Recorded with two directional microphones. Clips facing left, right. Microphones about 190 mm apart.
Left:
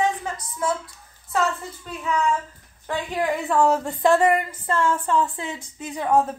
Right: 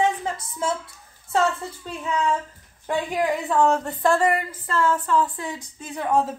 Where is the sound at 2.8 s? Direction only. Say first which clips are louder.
Right 2 dB; 10° right (ahead or behind).